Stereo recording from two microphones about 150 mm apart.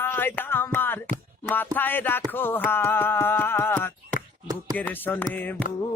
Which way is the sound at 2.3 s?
15° left (ahead or behind).